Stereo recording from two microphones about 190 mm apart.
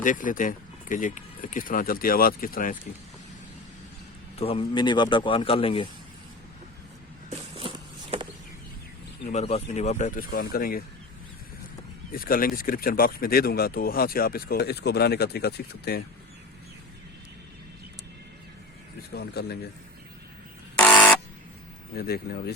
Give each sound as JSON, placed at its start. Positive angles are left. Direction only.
{"t": 0.0, "sound": "speech", "side_deg": 45}
{"t": 4.4, "sound": "a man's voice", "side_deg": 30}
{"t": 7.3, "sound": "walk", "side_deg": -30}
{"t": 9.2, "sound": "speech", "side_deg": 35}
{"t": 12.1, "sound": "speech", "side_deg": 50}
{"t": 19.1, "sound": "speech", "side_deg": 60}
{"t": 20.7, "sound": "buzzer", "side_deg": 5}
{"t": 21.9, "sound": "speech", "side_deg": 55}